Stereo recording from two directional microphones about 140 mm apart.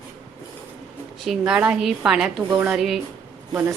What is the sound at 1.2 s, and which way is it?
A woman's voice, 5° right (ahead or behind).